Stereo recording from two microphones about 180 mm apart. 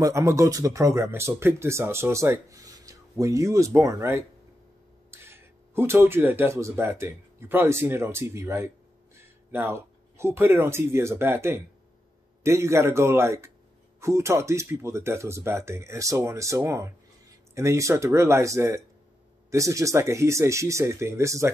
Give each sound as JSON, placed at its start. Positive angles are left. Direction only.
{"t": 0.0, "sound": "speech", "side_deg": -15}